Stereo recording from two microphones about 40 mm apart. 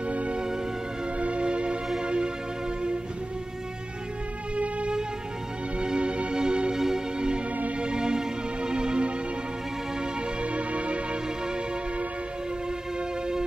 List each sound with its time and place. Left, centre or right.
0.0 s music: right
4.6 s music: right
10.4 s music: right